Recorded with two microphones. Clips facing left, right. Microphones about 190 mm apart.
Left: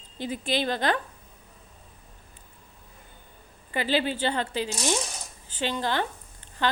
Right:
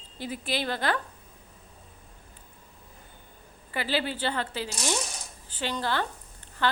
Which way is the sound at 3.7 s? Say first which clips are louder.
Left 3 dB; 20° left (ahead or behind).